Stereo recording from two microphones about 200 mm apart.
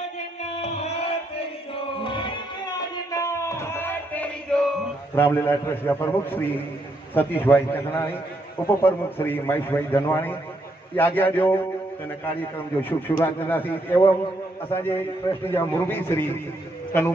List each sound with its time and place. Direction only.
0.6 s a sound: 35° left (ahead or behind)
2.0 s music: 25° left (ahead or behind)
7.2 s a man's voice: 10° left (ahead or behind)
13.0 s a man's voice: 10° left (ahead or behind)